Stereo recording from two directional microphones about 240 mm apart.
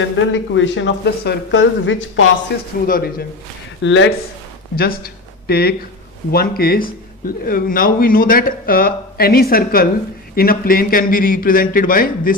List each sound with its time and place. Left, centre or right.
0.3 s speech: left
3.8 s speech: left
4.7 s speech: left